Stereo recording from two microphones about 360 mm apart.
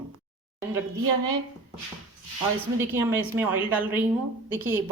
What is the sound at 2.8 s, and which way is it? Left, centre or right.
A woman's voice, centre.